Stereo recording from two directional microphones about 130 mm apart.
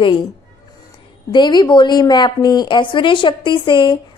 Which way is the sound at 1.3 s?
35° left (ahead or behind).